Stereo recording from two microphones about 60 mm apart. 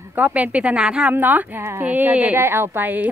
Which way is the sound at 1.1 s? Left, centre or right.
Right.